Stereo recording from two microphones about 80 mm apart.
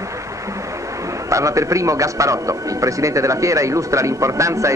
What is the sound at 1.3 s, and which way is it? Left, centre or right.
A man's voice, right.